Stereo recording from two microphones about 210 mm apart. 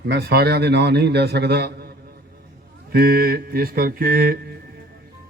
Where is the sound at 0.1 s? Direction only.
50° right (ahead or behind).